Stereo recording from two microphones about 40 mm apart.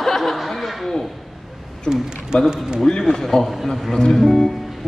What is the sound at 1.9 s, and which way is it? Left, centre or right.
Speech, centre.